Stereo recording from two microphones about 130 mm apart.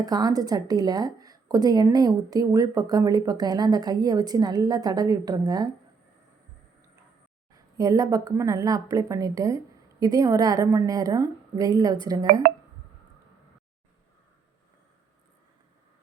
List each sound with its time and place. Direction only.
0.0 s speech: 30° right (ahead or behind)
7.5 s speech: 30° right (ahead or behind)
12.2 s speech: 90° right